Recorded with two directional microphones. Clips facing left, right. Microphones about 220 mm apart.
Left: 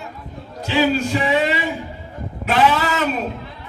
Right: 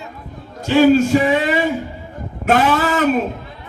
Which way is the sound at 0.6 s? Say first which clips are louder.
Right 7 dB; 45° right (ahead or behind).